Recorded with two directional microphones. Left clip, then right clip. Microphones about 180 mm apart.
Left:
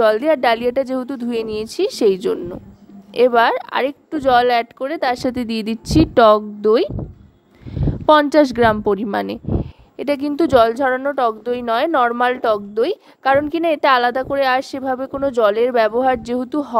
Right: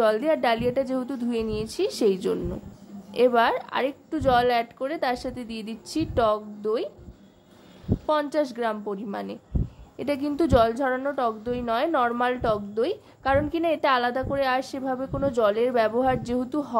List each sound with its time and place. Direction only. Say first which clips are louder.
0.0 s a woman's voice: left 7 dB; 45° left (ahead or behind)
8.1 s a woman's voice: left 12 dB; 45° left (ahead or behind)